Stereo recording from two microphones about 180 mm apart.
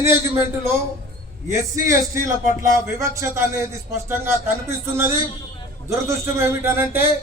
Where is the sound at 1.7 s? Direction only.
15° right (ahead or behind).